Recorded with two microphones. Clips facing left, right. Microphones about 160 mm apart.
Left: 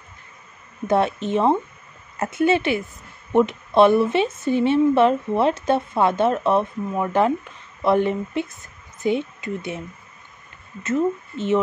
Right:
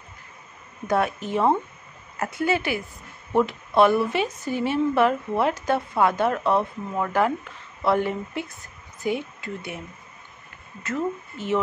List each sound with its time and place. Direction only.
0.8 s a woman's voice: 25° left (ahead or behind)
10.8 s a woman's voice: 20° left (ahead or behind)